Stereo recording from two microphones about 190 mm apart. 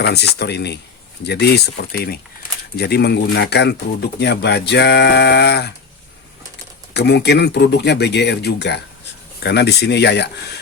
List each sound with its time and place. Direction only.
0.0 s speech: 60° left (ahead or behind)
6.9 s speech: 60° left (ahead or behind)